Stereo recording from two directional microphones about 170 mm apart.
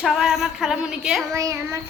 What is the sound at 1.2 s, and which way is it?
Child singing, 20° right (ahead or behind).